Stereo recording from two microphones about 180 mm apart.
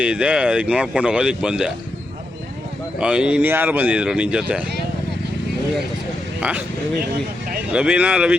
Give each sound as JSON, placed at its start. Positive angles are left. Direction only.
{"t": 0.0, "sound": "speech", "side_deg": -5}
{"t": 3.0, "sound": "speech", "side_deg": -5}
{"t": 7.7, "sound": "speech", "side_deg": -5}